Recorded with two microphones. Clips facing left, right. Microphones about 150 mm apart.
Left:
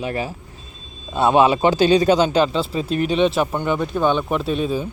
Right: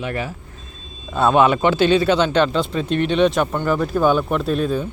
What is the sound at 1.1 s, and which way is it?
Speech, 25° left (ahead or behind).